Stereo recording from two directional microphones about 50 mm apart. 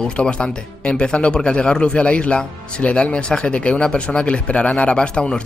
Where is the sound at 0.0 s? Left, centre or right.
Centre.